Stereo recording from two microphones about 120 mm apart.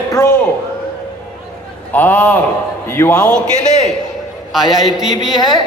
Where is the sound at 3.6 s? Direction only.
70° left (ahead or behind).